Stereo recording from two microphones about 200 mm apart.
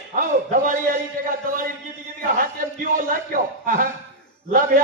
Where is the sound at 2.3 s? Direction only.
45° right (ahead or behind).